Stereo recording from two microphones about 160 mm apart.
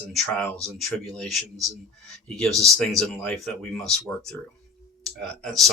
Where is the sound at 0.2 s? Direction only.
10° left (ahead or behind).